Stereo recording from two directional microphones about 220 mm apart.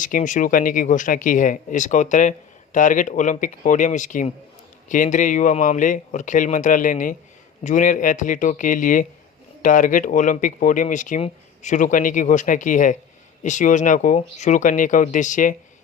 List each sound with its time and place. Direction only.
0.0 s speech: 35° left (ahead or behind)